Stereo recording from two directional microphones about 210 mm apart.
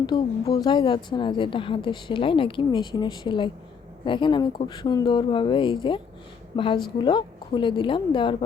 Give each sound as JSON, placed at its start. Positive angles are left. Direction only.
{"t": 0.0, "sound": "a woman's voice", "side_deg": 15}